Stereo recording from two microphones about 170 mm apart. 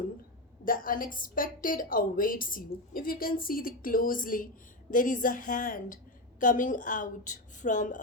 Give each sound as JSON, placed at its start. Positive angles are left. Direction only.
{"t": 0.6, "sound": "a woman's voice", "side_deg": 55}